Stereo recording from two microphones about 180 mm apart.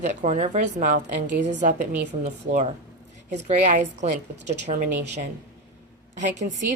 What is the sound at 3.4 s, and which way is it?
A woman's voice, 40° right (ahead or behind).